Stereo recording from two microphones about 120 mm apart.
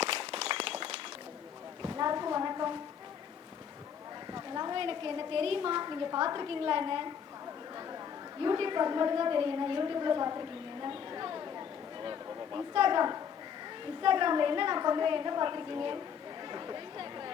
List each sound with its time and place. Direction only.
0.0 s applause: 50° right (ahead or behind)
1.8 s a sound: 35° right (ahead or behind)
4.3 s a woman's voice: 35° right (ahead or behind)
11.1 s a sound: 35° right (ahead or behind)
13.8 s a woman's voice: 45° right (ahead or behind)
16.5 s chatter: 35° right (ahead or behind)